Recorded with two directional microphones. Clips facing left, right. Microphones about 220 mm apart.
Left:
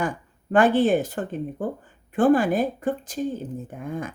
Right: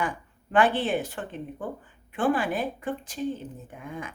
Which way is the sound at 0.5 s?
45° left (ahead or behind).